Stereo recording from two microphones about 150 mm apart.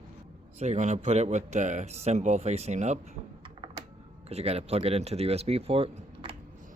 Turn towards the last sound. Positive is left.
turn(degrees=-40)  # may be behind; listen again after turning